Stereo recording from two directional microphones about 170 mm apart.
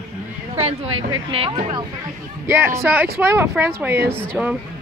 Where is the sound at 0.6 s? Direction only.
35° right (ahead or behind).